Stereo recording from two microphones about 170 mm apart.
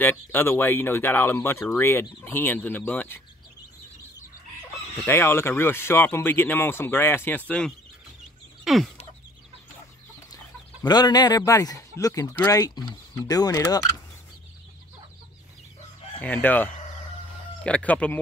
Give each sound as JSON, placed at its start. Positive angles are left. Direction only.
{"t": 0.0, "sound": "speech", "side_deg": 10}
{"t": 5.0, "sound": "speech", "side_deg": 15}
{"t": 8.6, "sound": "chicken", "side_deg": 0}
{"t": 10.3, "sound": "speech", "side_deg": 25}
{"t": 16.2, "sound": "speech", "side_deg": 10}